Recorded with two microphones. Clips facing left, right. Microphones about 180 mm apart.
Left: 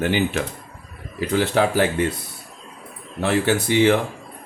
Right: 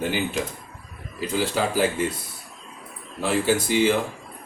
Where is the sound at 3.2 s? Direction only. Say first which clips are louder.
Left 2 dB; 70° left (ahead or behind).